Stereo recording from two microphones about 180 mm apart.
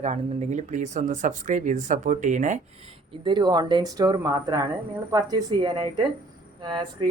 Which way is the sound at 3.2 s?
25° right (ahead or behind).